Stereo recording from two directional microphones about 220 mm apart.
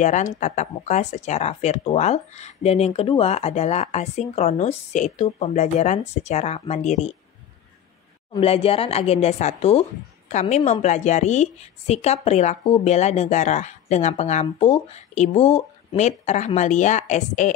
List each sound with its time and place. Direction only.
0.0 s speech: 35° left (ahead or behind)
8.4 s speech: 25° left (ahead or behind)